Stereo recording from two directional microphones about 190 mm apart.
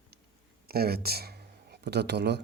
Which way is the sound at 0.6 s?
55° right (ahead or behind).